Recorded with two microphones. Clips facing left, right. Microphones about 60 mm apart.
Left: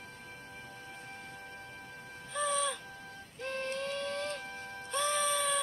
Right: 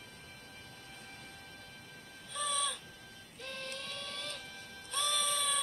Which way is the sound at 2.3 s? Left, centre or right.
Left.